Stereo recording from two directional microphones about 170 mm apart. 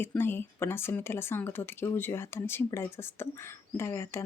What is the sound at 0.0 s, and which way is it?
Speech, 10° left (ahead or behind).